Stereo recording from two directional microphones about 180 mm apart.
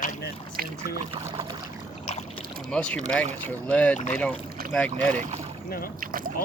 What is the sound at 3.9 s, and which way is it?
Speech, 40° left (ahead or behind).